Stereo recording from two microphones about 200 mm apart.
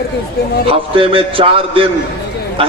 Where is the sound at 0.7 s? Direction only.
25° right (ahead or behind).